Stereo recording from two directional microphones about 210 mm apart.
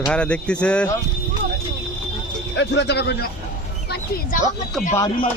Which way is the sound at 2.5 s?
55° left (ahead or behind).